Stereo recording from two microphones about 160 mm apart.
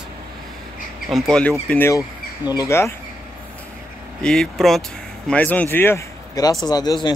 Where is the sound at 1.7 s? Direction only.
15° left (ahead or behind).